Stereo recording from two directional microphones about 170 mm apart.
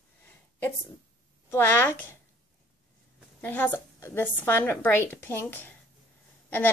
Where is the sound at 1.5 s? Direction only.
15° left (ahead or behind).